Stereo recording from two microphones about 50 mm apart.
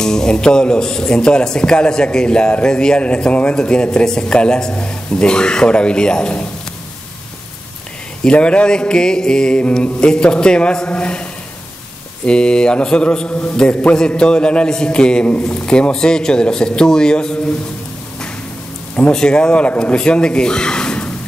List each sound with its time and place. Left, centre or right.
0.0 s a man's voice: centre
8.2 s a man's voice: left
12.3 s a man's voice: centre
19.1 s a man's voice: centre